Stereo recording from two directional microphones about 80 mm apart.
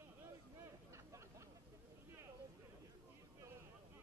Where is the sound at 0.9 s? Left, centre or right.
Right.